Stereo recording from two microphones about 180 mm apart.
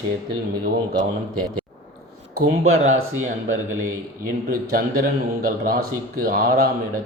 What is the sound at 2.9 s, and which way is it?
Speech, 45° right (ahead or behind).